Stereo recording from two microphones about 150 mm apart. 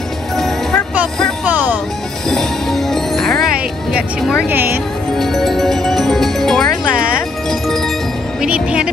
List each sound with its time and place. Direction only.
0.4 s music: centre (ahead or behind)
1.4 s music: 10° right (ahead or behind)
2.2 s music: 5° left (ahead or behind)
4.5 s speech: 15° right (ahead or behind)
5.1 s music: centre (ahead or behind)
8.4 s speech: 5° right (ahead or behind)